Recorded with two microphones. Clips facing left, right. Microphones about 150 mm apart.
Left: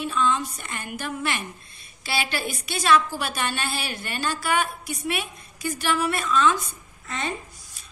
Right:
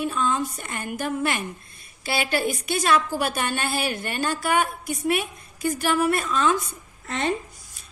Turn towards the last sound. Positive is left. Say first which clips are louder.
# right 5 dB
turn(degrees=-55)  # may be behind; listen again after turning